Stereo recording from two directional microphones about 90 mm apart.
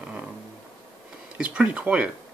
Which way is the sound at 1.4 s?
15° right (ahead or behind).